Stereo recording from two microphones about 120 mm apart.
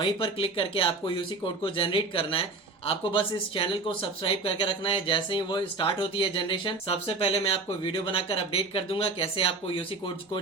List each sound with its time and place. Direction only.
0.0 s speech: 45° left (ahead or behind)